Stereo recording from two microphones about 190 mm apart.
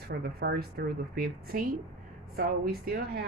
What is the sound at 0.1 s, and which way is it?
A woman's voice, 55° right (ahead or behind).